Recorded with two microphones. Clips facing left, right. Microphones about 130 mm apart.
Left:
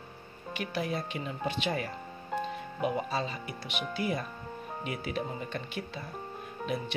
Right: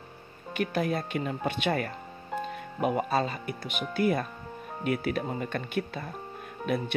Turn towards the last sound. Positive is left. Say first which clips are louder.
# right 4 dB
turn(degrees=-55)  # may be behind; listen again after turning